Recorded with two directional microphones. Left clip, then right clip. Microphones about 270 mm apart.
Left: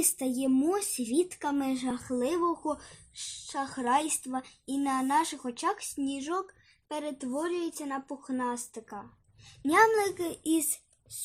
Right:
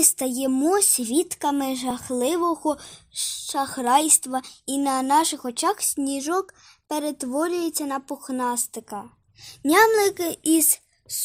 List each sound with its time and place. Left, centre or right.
0.0 s speech: right